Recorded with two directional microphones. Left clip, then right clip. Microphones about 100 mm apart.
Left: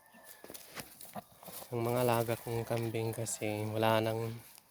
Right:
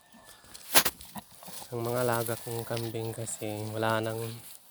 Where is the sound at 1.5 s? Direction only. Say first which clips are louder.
Right 2 dB; 15° left (ahead or behind).